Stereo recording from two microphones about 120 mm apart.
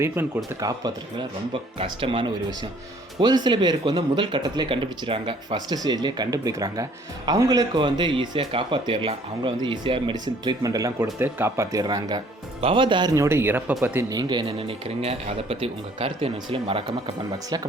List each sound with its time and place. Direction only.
0.0 s speech: 25° right (ahead or behind)
1.8 s speech: 45° right (ahead or behind)
10.6 s speech: 30° right (ahead or behind)
11.2 s speech: 20° right (ahead or behind)
11.8 s speech: 35° right (ahead or behind)
13.2 s speech: 20° right (ahead or behind)
14.1 s speech: 35° right (ahead or behind)
14.8 s speech: 55° right (ahead or behind)